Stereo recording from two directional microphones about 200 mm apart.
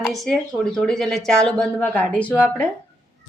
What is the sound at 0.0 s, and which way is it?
A woman's voice, centre (ahead or behind).